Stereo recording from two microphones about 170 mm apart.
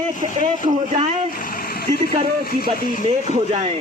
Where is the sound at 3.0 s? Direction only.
40° right (ahead or behind).